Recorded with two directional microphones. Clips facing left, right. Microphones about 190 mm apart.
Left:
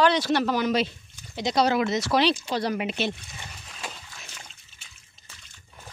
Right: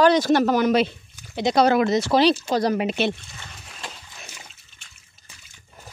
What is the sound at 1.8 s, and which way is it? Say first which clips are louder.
Speech: right 5 dB; 30° right (ahead or behind).